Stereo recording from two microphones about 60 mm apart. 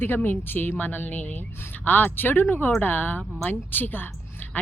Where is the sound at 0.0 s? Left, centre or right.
Left.